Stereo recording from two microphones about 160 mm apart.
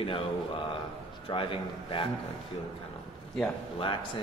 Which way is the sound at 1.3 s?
35° left (ahead or behind).